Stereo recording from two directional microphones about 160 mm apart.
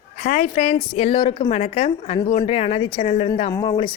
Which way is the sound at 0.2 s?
55° left (ahead or behind).